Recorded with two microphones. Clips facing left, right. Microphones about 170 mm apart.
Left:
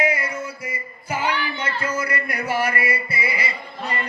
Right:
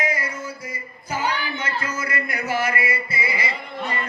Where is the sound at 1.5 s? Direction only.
30° left (ahead or behind).